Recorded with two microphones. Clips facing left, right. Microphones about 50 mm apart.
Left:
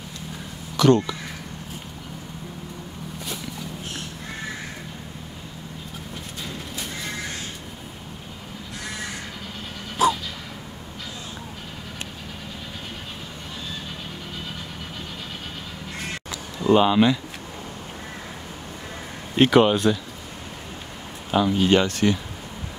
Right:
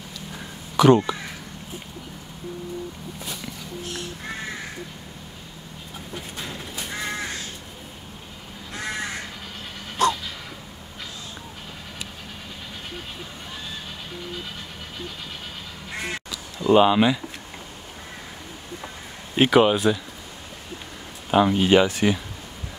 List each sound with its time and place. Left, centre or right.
0.7 s speech: centre
10.0 s a sound: centre
16.6 s speech: centre
19.3 s speech: centre
21.3 s speech: centre